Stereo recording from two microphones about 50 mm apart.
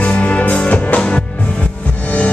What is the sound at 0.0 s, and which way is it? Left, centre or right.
Music, left.